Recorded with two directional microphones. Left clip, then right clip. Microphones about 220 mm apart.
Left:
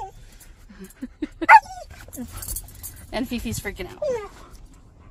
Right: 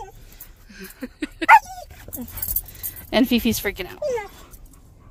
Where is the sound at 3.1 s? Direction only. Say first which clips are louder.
Right 9 dB; 50° right (ahead or behind).